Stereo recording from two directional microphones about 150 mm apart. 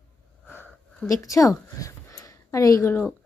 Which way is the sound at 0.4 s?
10° left (ahead or behind).